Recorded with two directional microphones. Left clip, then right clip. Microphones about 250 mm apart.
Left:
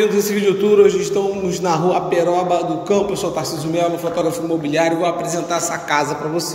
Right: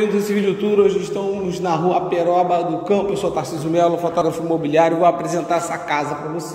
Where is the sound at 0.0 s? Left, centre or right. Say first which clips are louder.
Left 3 dB; centre.